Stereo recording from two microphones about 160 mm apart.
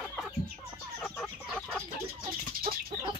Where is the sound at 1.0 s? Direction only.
5° left (ahead or behind).